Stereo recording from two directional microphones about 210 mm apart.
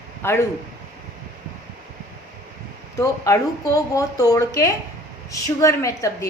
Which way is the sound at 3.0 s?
15° left (ahead or behind).